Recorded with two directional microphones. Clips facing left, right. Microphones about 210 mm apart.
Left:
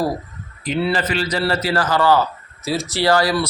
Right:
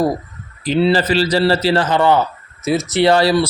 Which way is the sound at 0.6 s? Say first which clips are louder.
Right 6 dB; 30° right (ahead or behind).